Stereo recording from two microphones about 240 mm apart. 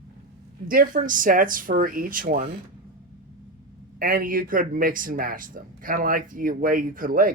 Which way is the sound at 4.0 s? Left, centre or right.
Right.